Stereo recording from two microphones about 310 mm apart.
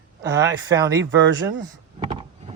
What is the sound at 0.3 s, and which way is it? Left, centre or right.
Speech, centre.